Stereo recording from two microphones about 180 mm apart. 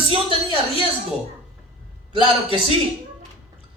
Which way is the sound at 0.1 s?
30° right (ahead or behind).